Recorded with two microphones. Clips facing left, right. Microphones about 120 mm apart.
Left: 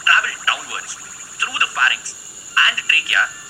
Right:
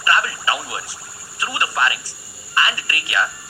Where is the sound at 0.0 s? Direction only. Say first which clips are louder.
Even; 20° right (ahead or behind).